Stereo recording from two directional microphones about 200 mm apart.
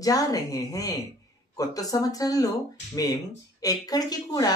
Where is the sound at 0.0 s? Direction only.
20° left (ahead or behind).